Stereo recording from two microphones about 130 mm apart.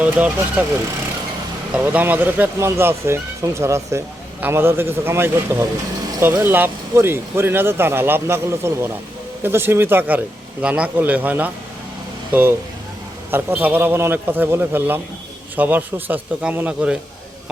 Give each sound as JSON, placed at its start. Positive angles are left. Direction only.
{"t": 0.0, "sound": "speech", "side_deg": -10}
{"t": 1.7, "sound": "speech", "side_deg": -10}